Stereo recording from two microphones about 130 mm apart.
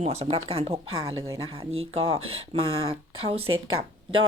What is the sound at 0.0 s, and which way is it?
A woman's voice, 55° right (ahead or behind).